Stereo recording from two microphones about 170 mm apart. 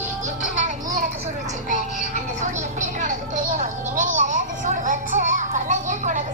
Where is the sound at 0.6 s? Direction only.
45° right (ahead or behind).